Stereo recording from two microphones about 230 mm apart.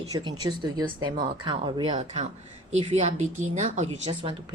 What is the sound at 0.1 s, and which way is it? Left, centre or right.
Speech, centre.